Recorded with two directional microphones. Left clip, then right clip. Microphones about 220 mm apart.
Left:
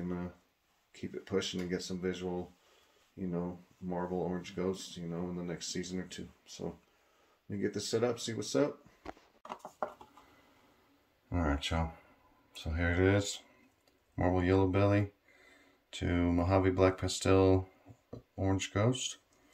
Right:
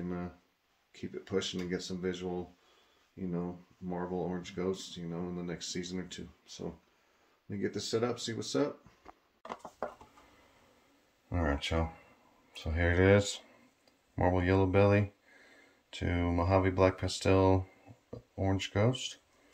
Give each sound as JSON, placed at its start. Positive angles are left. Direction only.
{"t": 0.9, "sound": "speech", "side_deg": -5}
{"t": 11.2, "sound": "speech", "side_deg": -5}